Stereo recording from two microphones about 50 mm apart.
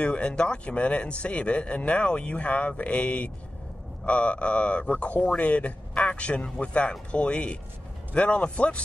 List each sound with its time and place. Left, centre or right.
0.0 s speech: left